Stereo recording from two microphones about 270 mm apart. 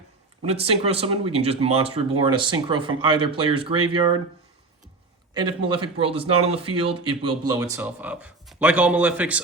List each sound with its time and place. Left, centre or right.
0.4 s speech: right
5.3 s speech: centre